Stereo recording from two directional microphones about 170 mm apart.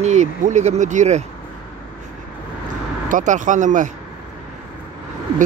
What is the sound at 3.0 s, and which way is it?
Speech, 50° right (ahead or behind).